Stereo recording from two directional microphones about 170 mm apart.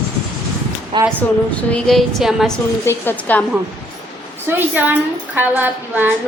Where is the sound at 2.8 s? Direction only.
10° left (ahead or behind).